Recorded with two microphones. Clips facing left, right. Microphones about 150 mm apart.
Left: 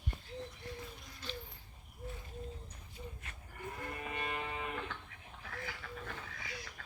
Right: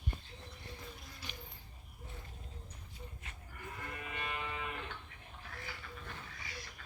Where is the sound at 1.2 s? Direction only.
15° right (ahead or behind).